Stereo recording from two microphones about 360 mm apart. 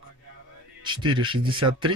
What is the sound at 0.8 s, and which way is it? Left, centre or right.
Speech, centre.